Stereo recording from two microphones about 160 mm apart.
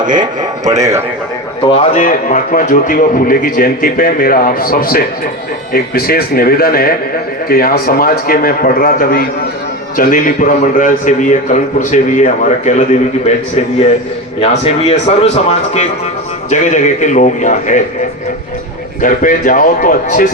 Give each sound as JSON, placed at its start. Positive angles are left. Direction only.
{"t": 0.0, "sound": "speech", "side_deg": -25}
{"t": 1.9, "sound": "a man's voice", "side_deg": 55}
{"t": 14.4, "sound": "a man's voice", "side_deg": 40}
{"t": 19.0, "sound": "a man's voice", "side_deg": 55}